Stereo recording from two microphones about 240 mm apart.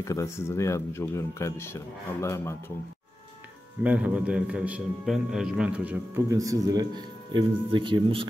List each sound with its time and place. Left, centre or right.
0.0 s speech: centre
3.8 s a man's voice: centre